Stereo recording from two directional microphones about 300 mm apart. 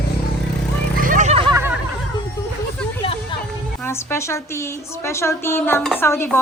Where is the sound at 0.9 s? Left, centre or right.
Right.